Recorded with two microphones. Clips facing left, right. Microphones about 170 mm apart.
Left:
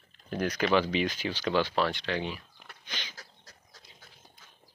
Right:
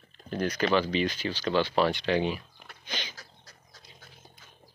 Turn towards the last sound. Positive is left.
turn(degrees=-20)  # may be behind; listen again after turning